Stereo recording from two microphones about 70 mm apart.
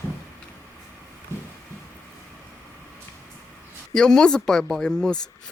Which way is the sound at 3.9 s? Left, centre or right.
Centre.